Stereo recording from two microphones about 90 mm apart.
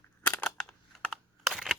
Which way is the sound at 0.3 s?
10° left (ahead or behind).